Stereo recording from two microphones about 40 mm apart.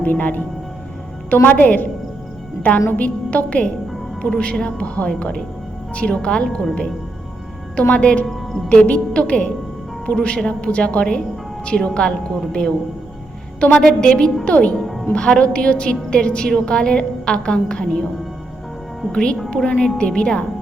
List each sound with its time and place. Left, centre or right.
0.0 s a woman's voice: left
1.5 s a woman's voice: left
7.8 s a woman's voice: left
8.3 s a woman's voice: centre
8.7 s a woman's voice: left
19.1 s a woman's voice: left